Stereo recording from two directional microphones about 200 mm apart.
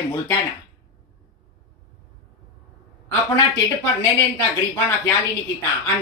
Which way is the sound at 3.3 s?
15° left (ahead or behind).